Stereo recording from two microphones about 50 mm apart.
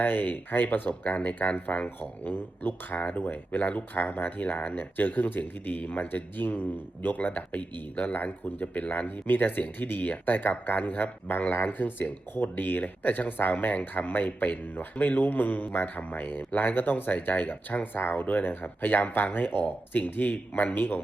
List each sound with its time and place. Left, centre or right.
0.0 s speech: left